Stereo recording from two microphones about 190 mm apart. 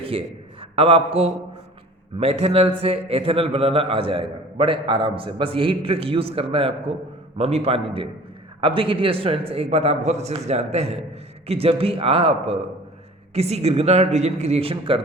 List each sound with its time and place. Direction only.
0.0 s a man's voice: 30° right (ahead or behind)